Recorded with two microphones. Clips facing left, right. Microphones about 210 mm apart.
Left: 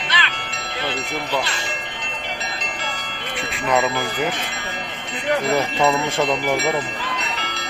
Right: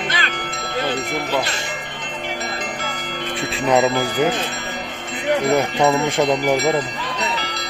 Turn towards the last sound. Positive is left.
turn(degrees=-15)  # may be behind; listen again after turning